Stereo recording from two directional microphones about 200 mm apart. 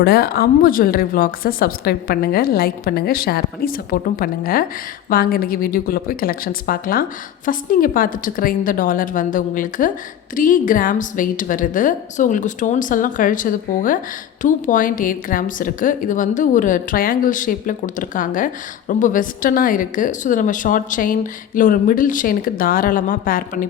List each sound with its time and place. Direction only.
0.0 s a woman's voice: 50° left (ahead or behind)